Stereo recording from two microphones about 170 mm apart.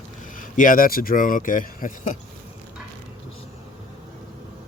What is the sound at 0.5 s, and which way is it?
Speech, 55° left (ahead or behind).